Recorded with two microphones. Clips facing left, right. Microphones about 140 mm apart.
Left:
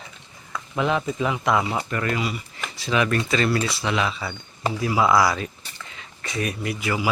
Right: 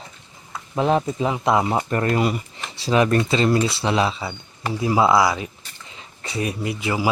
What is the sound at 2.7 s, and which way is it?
Speech, 35° right (ahead or behind).